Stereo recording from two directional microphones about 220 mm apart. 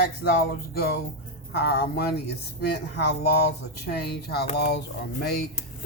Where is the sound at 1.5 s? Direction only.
45° left (ahead or behind).